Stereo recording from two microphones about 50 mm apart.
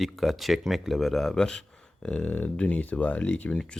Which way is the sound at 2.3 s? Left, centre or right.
Left.